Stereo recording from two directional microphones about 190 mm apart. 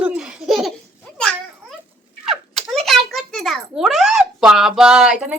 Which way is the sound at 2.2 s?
Centre (ahead or behind).